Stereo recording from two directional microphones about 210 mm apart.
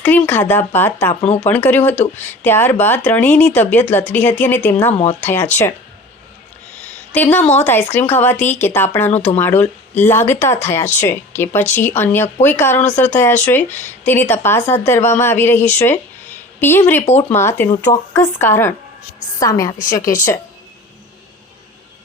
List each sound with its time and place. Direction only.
0.0 s speech: 10° left (ahead or behind)
1.1 s speech: 30° left (ahead or behind)
1.5 s speech: 10° left (ahead or behind)
4.9 s speech: 30° left (ahead or behind)
5.3 s speech: 10° left (ahead or behind)
7.1 s speech: 10° left (ahead or behind)
17.1 s speech: 30° left (ahead or behind)
17.3 s speech: 10° left (ahead or behind)